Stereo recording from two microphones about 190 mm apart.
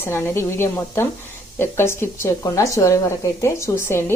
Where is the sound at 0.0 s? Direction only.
10° left (ahead or behind).